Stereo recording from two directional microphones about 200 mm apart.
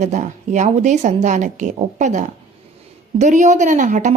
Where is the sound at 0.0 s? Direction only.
35° right (ahead or behind).